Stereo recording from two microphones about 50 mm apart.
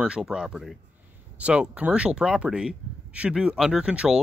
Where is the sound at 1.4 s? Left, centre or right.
Right.